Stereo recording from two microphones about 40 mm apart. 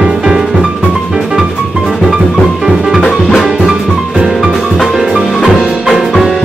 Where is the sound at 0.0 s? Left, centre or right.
Centre.